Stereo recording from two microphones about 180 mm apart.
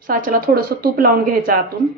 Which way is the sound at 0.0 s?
50° right (ahead or behind).